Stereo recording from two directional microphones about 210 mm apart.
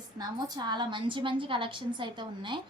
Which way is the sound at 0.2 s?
20° right (ahead or behind).